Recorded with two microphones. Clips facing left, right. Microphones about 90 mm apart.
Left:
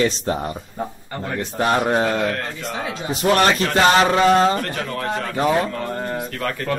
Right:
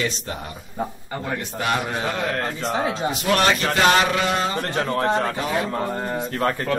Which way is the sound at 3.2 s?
40° left (ahead or behind).